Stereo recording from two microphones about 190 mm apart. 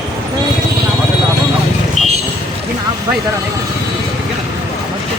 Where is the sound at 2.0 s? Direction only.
35° left (ahead or behind).